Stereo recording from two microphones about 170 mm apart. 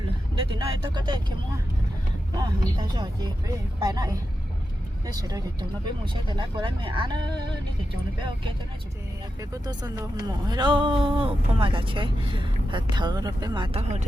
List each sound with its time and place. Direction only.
0.5 s speech: 25° right (ahead or behind)
2.3 s speech: 25° right (ahead or behind)
9.4 s speech: 20° right (ahead or behind)